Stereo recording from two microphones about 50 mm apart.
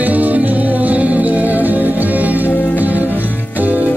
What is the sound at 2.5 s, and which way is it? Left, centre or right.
Music, left.